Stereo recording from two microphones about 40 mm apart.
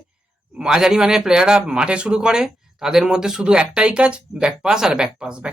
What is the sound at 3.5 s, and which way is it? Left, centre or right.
Speech, right.